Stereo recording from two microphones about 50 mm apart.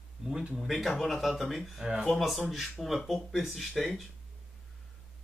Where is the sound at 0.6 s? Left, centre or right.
Centre.